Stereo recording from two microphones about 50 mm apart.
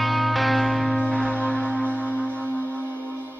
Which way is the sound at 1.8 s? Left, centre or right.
Left.